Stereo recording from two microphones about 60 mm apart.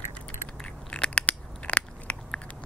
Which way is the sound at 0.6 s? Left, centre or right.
Centre.